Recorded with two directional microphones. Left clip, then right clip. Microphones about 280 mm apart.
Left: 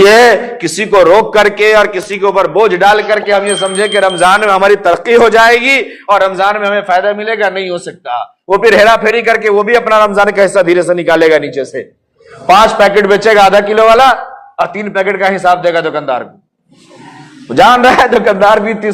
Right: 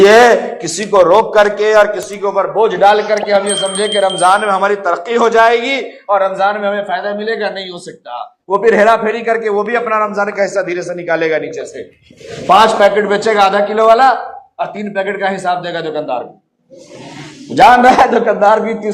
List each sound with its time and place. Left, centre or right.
0.0 s a man's voice: left
3.4 s speech: centre
4.1 s a man's voice: left
17.5 s a man's voice: left